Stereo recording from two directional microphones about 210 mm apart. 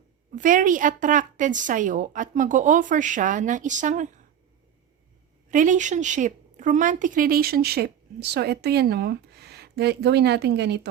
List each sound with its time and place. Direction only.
0.3 s a woman's voice: 40° right (ahead or behind)
5.5 s a woman's voice: 35° right (ahead or behind); by 10.8 s 50° right (ahead or behind)